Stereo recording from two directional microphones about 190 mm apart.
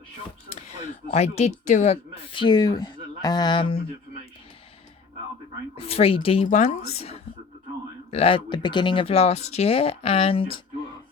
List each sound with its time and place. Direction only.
1.1 s speech: 35° left (ahead or behind)
5.7 s speech: 30° left (ahead or behind)